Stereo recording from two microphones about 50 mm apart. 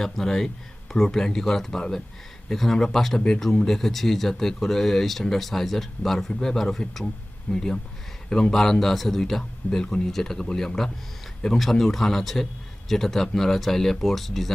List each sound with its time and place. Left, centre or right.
0.0 s a man's voice: centre